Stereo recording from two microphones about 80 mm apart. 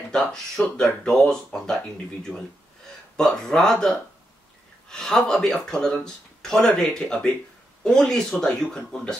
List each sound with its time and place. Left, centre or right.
0.1 s speech: centre
3.2 s speech: centre